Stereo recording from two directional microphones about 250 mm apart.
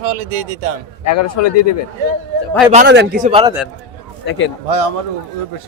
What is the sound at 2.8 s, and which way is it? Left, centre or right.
Speech, right.